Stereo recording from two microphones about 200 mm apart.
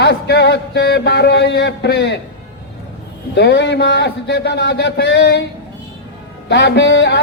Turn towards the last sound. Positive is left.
turn(degrees=60)  # may be behind; listen again after turning